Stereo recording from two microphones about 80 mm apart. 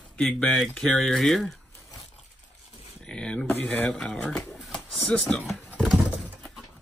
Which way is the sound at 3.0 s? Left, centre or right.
Centre.